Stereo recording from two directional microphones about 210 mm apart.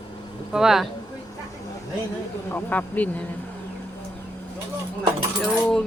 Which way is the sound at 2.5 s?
10° left (ahead or behind).